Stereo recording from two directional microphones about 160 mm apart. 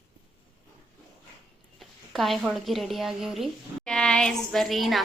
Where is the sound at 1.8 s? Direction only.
Centre (ahead or behind).